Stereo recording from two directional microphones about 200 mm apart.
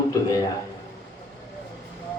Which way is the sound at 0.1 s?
15° left (ahead or behind).